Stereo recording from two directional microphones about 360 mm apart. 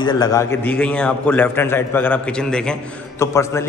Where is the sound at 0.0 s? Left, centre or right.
Centre.